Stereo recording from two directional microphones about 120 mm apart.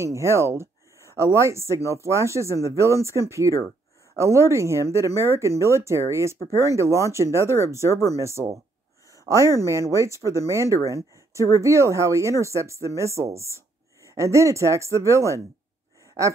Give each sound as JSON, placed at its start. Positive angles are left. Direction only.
{"t": 0.0, "sound": "speech", "side_deg": -25}
{"t": 7.9, "sound": "speech", "side_deg": 25}
{"t": 8.2, "sound": "speech", "side_deg": -25}